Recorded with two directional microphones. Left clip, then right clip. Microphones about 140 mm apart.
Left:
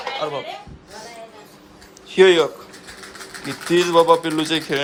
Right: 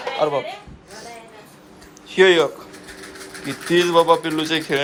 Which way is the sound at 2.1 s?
30° left (ahead or behind).